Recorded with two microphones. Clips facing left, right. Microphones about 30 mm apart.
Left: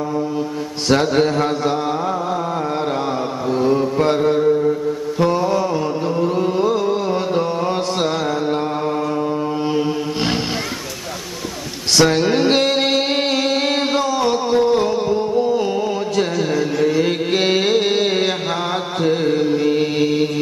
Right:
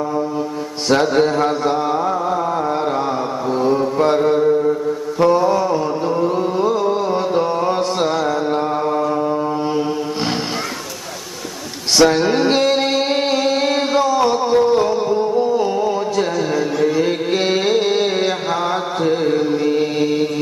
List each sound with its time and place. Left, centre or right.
0.8 s mantra: centre
12.0 s music: centre